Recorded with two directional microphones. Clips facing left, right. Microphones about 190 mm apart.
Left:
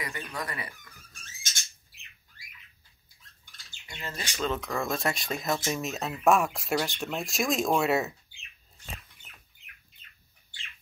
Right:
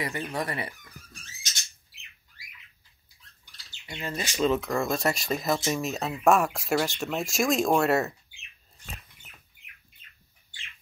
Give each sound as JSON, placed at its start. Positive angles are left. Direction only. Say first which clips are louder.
{"t": 0.0, "sound": "speech", "louder": "right 5 dB", "side_deg": -25}
{"t": 3.8, "sound": "speech", "louder": "right 5 dB", "side_deg": -25}
{"t": 4.1, "sound": "speech", "louder": "right 6 dB", "side_deg": -10}